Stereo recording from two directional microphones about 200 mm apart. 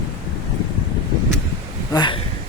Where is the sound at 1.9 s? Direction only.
20° left (ahead or behind).